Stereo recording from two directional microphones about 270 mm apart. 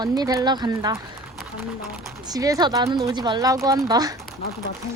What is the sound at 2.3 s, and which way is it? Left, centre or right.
Speech, centre.